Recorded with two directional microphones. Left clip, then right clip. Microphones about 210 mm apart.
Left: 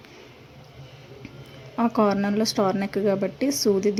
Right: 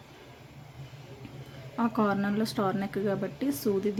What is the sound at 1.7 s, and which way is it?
A woman's voice, 15° left (ahead or behind).